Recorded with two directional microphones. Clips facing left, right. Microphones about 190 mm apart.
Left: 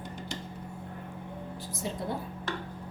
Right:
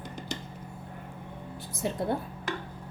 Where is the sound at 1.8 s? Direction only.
55° right (ahead or behind).